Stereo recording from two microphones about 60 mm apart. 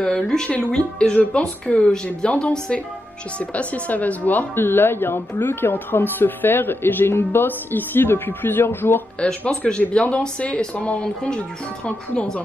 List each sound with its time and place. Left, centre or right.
0.0 s speech: centre
4.6 s speech: left
9.2 s speech: left